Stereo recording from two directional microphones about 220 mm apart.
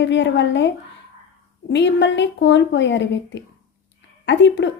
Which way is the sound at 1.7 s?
55° left (ahead or behind).